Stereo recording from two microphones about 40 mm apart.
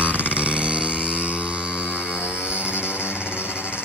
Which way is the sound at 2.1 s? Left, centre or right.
Right.